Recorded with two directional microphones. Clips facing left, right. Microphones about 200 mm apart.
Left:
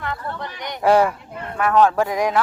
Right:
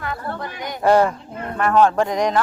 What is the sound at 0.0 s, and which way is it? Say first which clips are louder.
Speech: right 1 dB; 5° right (ahead or behind).